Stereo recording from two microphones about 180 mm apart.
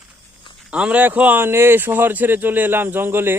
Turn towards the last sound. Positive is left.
turn(degrees=-10)  # may be behind; listen again after turning